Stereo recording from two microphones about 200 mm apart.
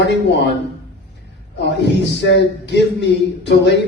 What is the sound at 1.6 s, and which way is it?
Speech, 60° left (ahead or behind).